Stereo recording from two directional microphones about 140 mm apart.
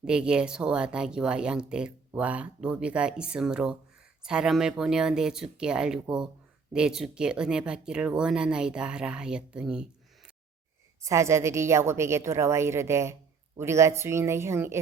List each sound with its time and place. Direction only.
0.0 s speech: 5° right (ahead or behind)
11.0 s a woman's voice: 20° right (ahead or behind)